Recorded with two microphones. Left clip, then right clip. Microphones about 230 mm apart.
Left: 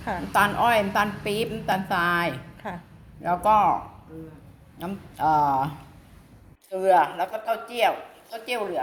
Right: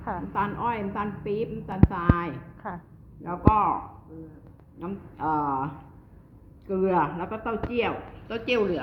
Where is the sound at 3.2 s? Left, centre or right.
Left.